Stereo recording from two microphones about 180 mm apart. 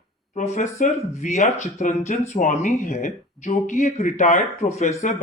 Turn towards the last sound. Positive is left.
turn(degrees=40)  # may be behind; listen again after turning